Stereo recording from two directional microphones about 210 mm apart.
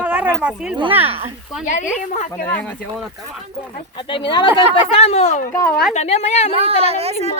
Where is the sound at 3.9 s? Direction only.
25° left (ahead or behind).